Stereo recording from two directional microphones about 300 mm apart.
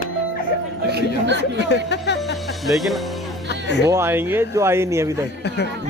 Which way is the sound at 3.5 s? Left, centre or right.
Left.